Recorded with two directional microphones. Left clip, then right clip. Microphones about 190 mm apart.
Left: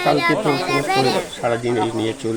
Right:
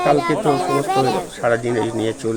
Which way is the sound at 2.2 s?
10° right (ahead or behind).